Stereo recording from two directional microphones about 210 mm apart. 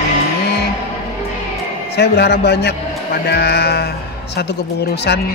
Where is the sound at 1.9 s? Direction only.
50° left (ahead or behind).